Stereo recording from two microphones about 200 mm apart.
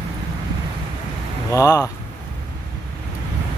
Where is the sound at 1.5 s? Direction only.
15° left (ahead or behind).